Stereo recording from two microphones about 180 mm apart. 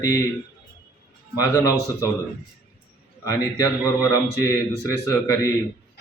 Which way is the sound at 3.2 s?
20° left (ahead or behind).